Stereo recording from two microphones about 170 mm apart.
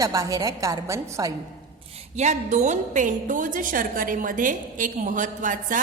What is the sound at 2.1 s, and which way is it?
A woman's voice, 45° right (ahead or behind).